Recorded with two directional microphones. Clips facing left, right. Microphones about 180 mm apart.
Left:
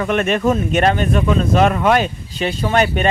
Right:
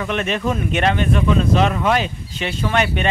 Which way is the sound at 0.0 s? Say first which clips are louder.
Left 5 dB; 50° left (ahead or behind).